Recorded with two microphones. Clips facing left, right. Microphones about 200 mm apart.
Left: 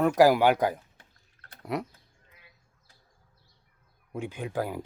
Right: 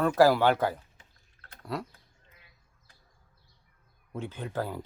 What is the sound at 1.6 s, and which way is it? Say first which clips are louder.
Bird: left 3 dB; 20° left (ahead or behind).